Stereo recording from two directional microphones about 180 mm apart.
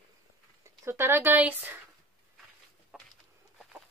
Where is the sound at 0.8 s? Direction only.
15° right (ahead or behind).